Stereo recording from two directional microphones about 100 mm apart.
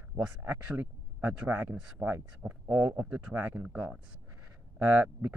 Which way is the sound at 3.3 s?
25° right (ahead or behind).